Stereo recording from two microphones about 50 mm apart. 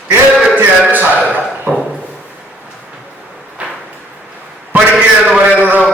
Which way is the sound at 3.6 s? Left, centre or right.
Right.